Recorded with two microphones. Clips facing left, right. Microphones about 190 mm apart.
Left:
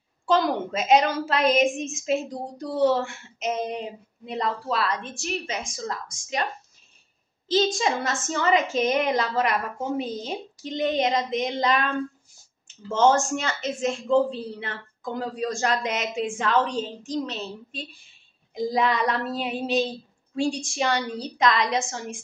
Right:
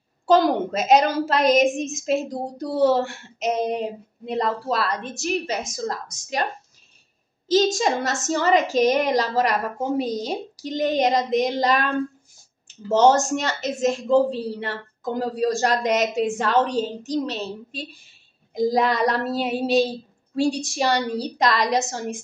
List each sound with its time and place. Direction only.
0.3 s a woman's voice: 40° right (ahead or behind)
7.4 s a woman's voice: 45° right (ahead or behind)